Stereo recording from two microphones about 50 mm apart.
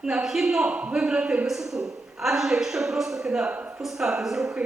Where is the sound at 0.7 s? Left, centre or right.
Right; by 4.5 s centre.